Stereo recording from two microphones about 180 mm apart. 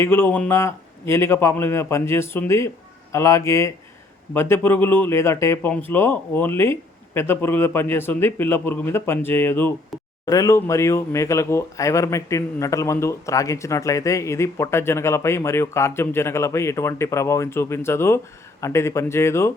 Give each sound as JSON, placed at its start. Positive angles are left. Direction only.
{"t": 0.0, "sound": "speech", "side_deg": 10}